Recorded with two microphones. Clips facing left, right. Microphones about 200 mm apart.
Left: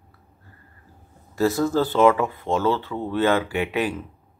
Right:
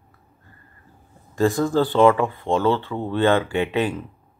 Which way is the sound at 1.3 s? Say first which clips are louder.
Right 1 dB; 5° left (ahead or behind).